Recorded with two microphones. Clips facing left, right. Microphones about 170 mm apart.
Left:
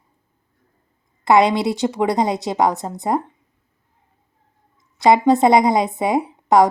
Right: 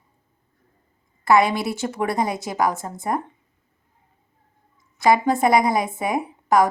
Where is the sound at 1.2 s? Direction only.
20° left (ahead or behind).